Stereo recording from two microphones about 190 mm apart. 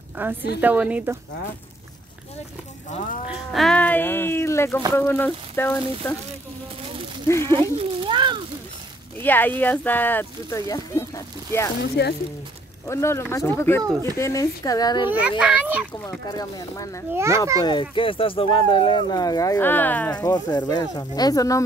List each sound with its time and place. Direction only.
0.2 s a child's voice: 10° right (ahead or behind)
3.3 s speech: centre (ahead or behind)
7.4 s a sound: 25° right (ahead or behind)
9.2 s speech: 10° left (ahead or behind)
12.0 s speech: 60° left (ahead or behind)
12.8 s speech: 15° left (ahead or behind)
15.0 s a child's voice: 5° right (ahead or behind)
16.0 s speech: 15° left (ahead or behind)
17.1 s a child's voice: 15° right (ahead or behind)
17.6 s speech: 25° left (ahead or behind); by 20.2 s 10° left (ahead or behind)
20.2 s speech: 20° left (ahead or behind)